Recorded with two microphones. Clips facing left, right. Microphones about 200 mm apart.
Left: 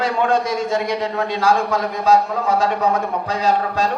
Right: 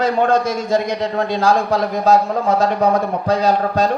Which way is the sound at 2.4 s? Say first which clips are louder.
Right 2 dB; 40° right (ahead or behind).